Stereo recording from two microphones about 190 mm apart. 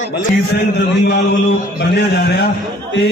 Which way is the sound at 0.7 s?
65° left (ahead or behind).